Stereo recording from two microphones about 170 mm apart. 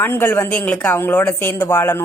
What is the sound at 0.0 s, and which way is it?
A woman's voice, 10° left (ahead or behind).